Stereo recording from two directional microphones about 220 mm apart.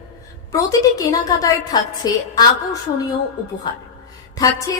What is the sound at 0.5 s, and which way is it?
A woman's voice, 15° left (ahead or behind).